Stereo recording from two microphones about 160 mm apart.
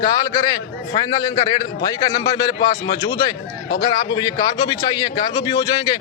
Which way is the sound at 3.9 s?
25° left (ahead or behind).